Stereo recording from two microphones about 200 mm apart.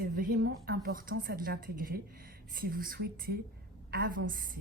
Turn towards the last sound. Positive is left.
turn(degrees=-45)  # may be behind; listen again after turning